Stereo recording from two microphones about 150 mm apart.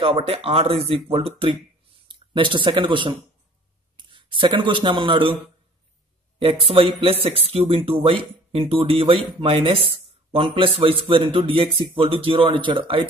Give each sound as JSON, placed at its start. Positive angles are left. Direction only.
{"t": 0.0, "sound": "speech", "side_deg": -40}
{"t": 6.6, "sound": "speech", "side_deg": -40}